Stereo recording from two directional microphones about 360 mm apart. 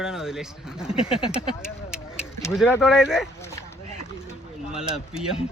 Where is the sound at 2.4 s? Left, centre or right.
Centre.